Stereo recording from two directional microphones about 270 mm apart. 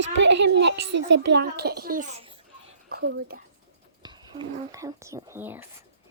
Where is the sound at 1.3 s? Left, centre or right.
Right.